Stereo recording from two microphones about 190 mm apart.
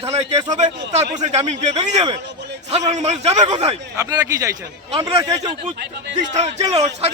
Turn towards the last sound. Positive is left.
turn(degrees=-35)  # may be behind; listen again after turning